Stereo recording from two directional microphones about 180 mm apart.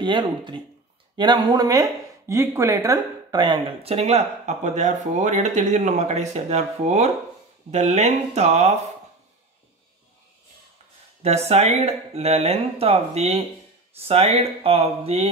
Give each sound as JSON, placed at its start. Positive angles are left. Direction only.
{"t": 0.0, "sound": "speech", "side_deg": -25}
{"t": 11.2, "sound": "speech", "side_deg": -35}